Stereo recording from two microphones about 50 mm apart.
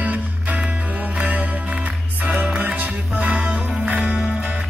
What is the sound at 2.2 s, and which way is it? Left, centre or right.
Music, right.